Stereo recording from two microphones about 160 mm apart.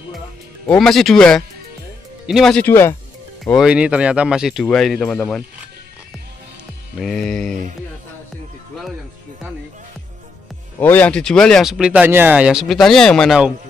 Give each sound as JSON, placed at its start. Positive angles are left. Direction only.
{"t": 0.7, "sound": "speech", "side_deg": 0}
{"t": 2.6, "sound": "speech", "side_deg": 15}
{"t": 3.4, "sound": "speech", "side_deg": -5}
{"t": 7.0, "sound": "speech", "side_deg": 5}
{"t": 10.8, "sound": "speech", "side_deg": 10}